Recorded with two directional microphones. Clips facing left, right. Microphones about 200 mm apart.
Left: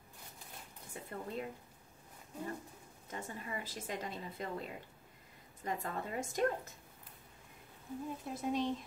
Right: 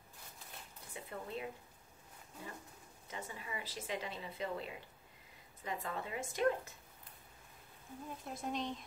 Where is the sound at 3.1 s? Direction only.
50° left (ahead or behind).